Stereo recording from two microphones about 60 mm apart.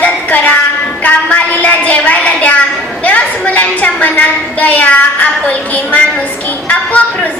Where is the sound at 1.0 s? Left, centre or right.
Left.